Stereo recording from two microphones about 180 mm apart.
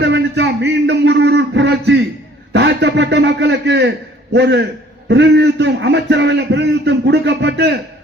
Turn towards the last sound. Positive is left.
turn(degrees=-75)  # may be behind; listen again after turning